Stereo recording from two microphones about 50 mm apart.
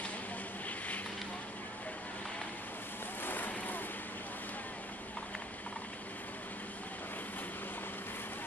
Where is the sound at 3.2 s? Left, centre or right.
Left.